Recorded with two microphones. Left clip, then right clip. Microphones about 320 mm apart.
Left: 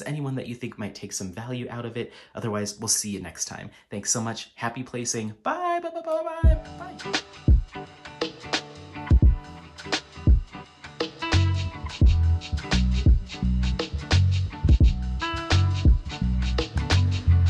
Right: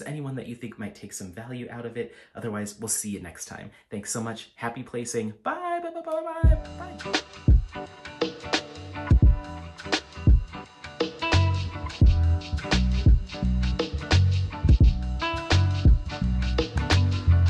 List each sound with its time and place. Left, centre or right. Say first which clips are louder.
0.0 s speech: left 3 dB; centre
7.0 s music: right 1 dB; centre